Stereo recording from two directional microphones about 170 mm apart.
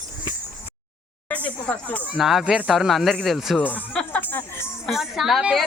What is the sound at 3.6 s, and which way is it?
Music, 10° left (ahead or behind).